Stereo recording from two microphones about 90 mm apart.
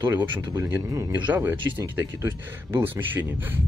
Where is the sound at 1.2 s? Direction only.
20° right (ahead or behind).